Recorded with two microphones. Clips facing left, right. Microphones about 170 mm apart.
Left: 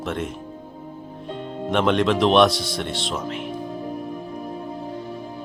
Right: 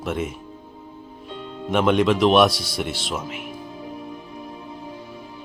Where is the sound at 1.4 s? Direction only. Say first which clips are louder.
Left 3 dB; 50° left (ahead or behind).